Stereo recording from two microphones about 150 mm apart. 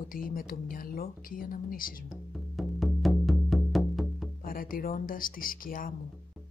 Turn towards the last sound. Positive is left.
turn(degrees=70)  # may be behind; listen again after turning